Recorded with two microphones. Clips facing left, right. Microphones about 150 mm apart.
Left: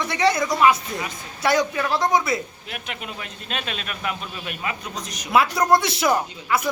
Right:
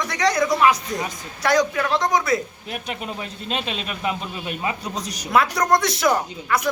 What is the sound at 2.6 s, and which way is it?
A man's voice, 35° right (ahead or behind).